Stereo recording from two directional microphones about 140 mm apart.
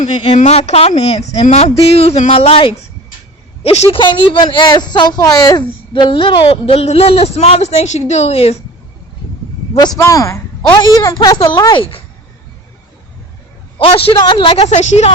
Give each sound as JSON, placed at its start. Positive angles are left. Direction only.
{"t": 0.3, "sound": "a woman's voice", "side_deg": 50}
{"t": 10.0, "sound": "speech", "side_deg": 20}
{"t": 13.7, "sound": "speech", "side_deg": 40}
{"t": 14.7, "sound": "a woman's voice", "side_deg": 55}